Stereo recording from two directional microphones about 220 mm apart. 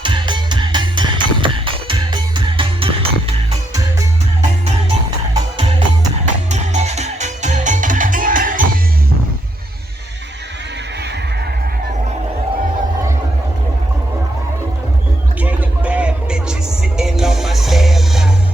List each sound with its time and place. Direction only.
0.0 s music: 20° right (ahead or behind)
5.3 s music: 20° right (ahead or behind)
6.5 s music: 30° right (ahead or behind)
15.4 s music: 5° right (ahead or behind)